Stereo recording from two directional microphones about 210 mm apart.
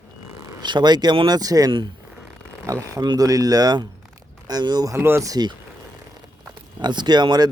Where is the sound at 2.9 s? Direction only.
20° right (ahead or behind).